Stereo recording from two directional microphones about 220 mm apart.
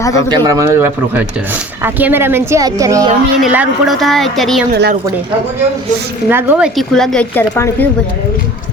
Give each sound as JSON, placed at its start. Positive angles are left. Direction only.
{"t": 0.0, "sound": "speech", "side_deg": 15}
{"t": 0.3, "sound": "speech", "side_deg": -15}
{"t": 3.4, "sound": "speech", "side_deg": -5}
{"t": 4.7, "sound": "a woman's voice", "side_deg": -45}
{"t": 6.2, "sound": "speech", "side_deg": -10}